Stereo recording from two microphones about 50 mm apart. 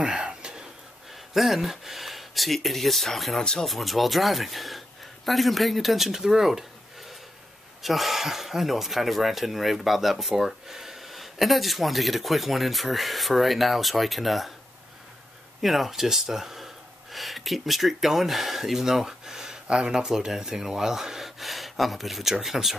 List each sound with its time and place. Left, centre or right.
0.0 s a sound: right
1.3 s speech: centre
7.8 s speech: centre
15.6 s speech: centre